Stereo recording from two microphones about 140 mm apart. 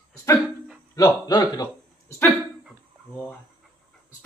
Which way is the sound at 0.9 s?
25° left (ahead or behind).